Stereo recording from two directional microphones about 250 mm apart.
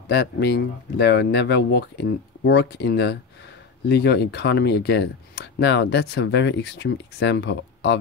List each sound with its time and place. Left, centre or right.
0.1 s speech: left